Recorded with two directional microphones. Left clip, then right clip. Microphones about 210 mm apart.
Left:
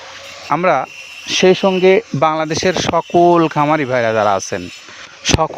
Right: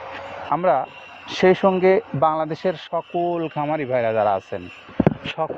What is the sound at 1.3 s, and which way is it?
Speech, 40° left (ahead or behind).